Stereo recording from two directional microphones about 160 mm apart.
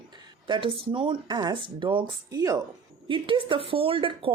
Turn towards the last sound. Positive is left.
turn(degrees=-35)  # may be behind; listen again after turning